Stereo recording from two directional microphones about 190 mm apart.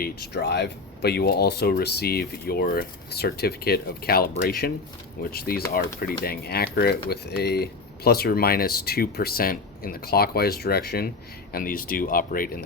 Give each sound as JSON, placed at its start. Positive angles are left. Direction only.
{"t": 0.0, "sound": "speech", "side_deg": 60}